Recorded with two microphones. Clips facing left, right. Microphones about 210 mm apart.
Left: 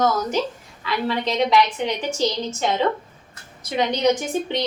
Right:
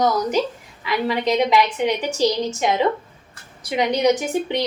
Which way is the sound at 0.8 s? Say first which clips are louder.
Right 3 dB; 15° right (ahead or behind).